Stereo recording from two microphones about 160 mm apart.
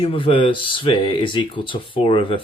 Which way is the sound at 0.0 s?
35° left (ahead or behind).